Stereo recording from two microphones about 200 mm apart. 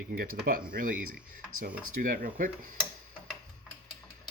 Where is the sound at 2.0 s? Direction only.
45° right (ahead or behind).